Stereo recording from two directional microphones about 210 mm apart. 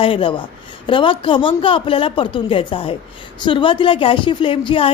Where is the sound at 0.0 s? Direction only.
25° left (ahead or behind).